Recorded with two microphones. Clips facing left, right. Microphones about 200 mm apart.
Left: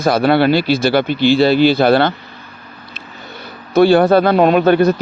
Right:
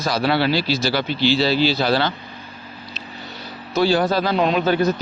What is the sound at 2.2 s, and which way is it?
Vehicle, 15° right (ahead or behind).